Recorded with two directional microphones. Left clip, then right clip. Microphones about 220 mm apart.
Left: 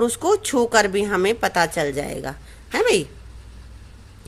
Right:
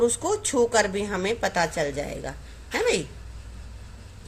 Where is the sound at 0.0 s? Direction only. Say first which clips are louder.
Left 4 dB; 40° left (ahead or behind).